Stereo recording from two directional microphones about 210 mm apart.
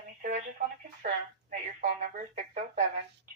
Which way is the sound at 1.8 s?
40° right (ahead or behind).